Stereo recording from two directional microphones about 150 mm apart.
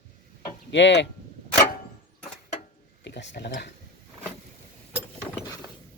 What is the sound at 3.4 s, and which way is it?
Speech, 90° left.